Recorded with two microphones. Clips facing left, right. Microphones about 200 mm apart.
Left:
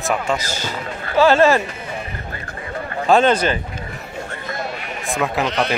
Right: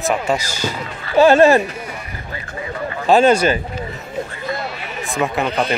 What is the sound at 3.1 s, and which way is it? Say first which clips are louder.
Speech: right 2 dB; 5° right (ahead or behind).